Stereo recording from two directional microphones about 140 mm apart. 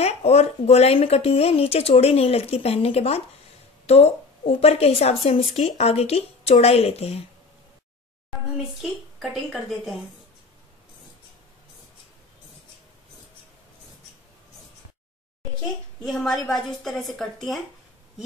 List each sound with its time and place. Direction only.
0.0 s a woman's voice: 50° left (ahead or behind)
9.2 s a woman's voice: centre (ahead or behind)
16.0 s a woman's voice: centre (ahead or behind)